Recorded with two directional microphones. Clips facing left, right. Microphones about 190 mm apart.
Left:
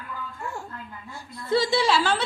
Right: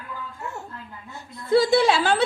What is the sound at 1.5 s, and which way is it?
Speech, 55° right (ahead or behind).